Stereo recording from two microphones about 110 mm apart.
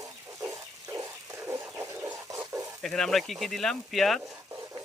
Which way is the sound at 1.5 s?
25° right (ahead or behind).